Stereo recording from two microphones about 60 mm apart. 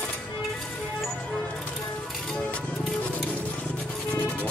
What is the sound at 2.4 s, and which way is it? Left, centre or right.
Music, left.